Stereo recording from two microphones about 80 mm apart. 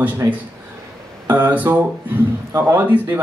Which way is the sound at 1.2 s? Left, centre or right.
Right.